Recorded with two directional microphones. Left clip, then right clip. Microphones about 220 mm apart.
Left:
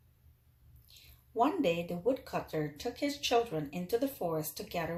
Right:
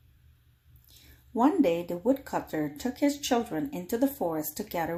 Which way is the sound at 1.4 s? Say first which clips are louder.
Right 5 dB; 30° right (ahead or behind).